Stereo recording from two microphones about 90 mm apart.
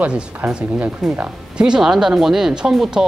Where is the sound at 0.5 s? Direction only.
10° right (ahead or behind).